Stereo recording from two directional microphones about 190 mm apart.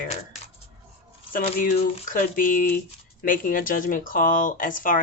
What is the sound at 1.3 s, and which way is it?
Speech, 45° left (ahead or behind).